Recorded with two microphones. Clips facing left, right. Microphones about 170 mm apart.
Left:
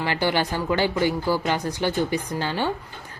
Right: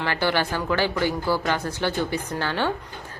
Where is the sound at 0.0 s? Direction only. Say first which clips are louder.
Left 1 dB; 15° left (ahead or behind).